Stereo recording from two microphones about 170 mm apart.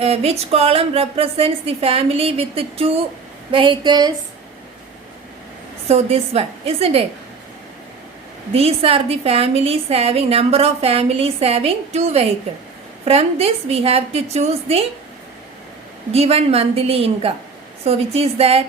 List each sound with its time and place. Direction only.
0.0 s a woman's voice: 35° right (ahead or behind)
5.9 s a woman's voice: 40° right (ahead or behind)
8.5 s a woman's voice: 35° right (ahead or behind)
16.1 s a woman's voice: 35° right (ahead or behind)